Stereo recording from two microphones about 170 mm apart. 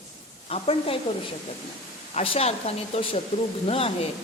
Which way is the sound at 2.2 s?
40° left (ahead or behind).